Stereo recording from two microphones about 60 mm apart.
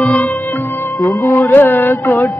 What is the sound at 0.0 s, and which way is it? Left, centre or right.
Music, left.